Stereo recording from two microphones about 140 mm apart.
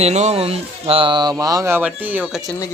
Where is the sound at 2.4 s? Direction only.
25° left (ahead or behind).